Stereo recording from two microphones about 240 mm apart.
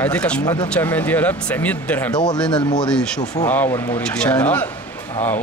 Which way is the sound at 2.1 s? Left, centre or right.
Centre.